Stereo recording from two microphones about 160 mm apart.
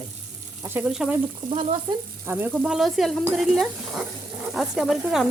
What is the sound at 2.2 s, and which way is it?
Speech, 10° right (ahead or behind).